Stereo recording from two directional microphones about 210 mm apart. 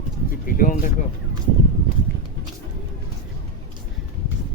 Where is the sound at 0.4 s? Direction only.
40° left (ahead or behind).